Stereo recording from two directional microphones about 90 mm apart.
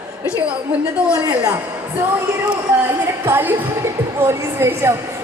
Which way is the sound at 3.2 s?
25° right (ahead or behind).